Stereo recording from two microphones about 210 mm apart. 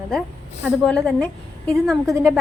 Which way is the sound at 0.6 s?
5° left (ahead or behind).